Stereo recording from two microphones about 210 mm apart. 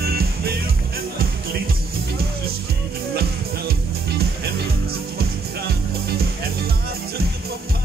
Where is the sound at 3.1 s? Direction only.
50° right (ahead or behind).